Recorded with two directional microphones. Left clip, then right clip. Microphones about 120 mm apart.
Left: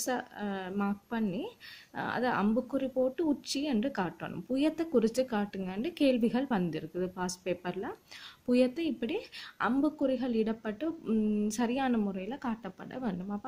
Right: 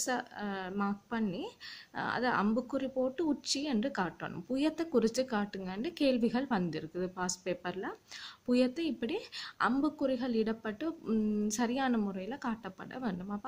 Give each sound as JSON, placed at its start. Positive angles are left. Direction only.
{"t": 0.0, "sound": "speech", "side_deg": 35}